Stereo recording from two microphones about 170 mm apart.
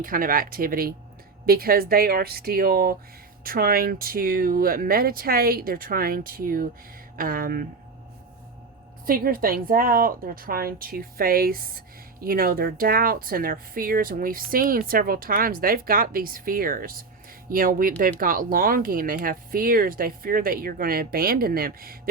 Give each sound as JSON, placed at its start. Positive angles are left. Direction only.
{"t": 0.0, "sound": "speech", "side_deg": -55}
{"t": 9.0, "sound": "speech", "side_deg": -60}